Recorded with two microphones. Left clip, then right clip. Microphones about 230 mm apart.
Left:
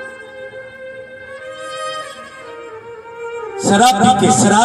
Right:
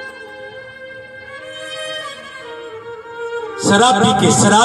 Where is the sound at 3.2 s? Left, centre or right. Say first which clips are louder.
Right 1 dB; centre.